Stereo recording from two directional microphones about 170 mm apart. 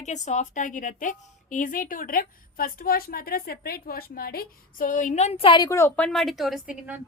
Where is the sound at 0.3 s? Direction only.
45° left (ahead or behind); by 6.1 s 15° left (ahead or behind).